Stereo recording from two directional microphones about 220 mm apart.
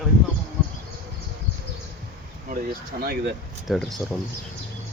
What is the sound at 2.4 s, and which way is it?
Speech, 40° right (ahead or behind).